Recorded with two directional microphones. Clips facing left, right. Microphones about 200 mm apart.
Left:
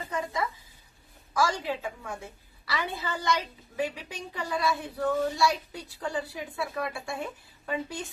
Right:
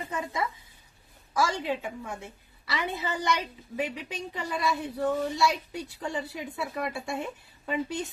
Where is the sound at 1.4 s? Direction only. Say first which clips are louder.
Even; 20° right (ahead or behind).